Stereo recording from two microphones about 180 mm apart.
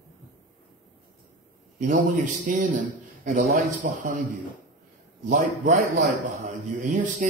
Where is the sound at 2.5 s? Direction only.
45° right (ahead or behind).